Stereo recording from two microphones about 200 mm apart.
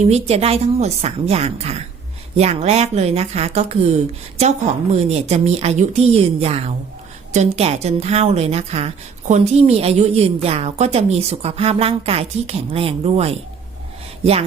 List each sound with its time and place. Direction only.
0.0 s a woman's voice: 30° right (ahead or behind)